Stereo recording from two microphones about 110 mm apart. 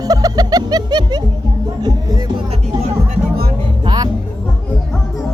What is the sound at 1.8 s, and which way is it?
Music, 35° right (ahead or behind).